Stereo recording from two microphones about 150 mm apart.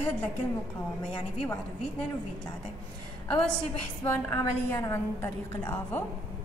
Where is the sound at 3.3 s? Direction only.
5° left (ahead or behind).